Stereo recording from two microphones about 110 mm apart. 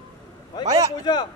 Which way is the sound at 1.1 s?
40° left (ahead or behind).